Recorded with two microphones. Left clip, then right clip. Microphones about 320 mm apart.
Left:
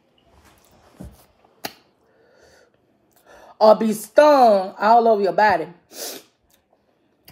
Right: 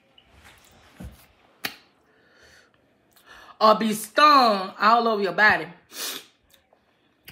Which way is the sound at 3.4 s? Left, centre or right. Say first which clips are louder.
Left 4 dB; centre.